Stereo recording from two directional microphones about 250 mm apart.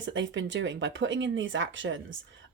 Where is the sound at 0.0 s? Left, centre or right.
Right.